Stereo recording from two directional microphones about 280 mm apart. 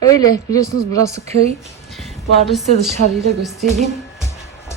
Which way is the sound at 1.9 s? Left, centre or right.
Centre.